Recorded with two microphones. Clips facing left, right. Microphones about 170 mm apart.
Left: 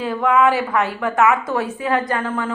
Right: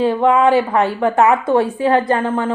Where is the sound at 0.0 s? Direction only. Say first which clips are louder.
Right 4 dB; 30° right (ahead or behind).